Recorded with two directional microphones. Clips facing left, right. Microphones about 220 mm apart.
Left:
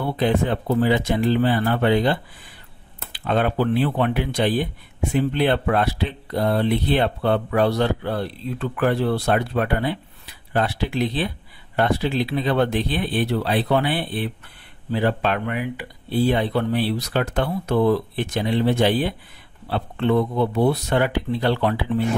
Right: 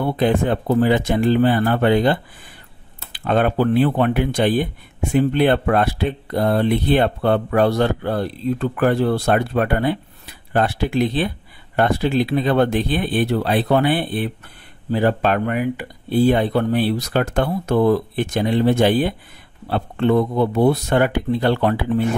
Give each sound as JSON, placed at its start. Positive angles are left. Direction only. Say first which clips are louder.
{"t": 0.0, "sound": "speech", "louder": "right 3 dB", "side_deg": -50}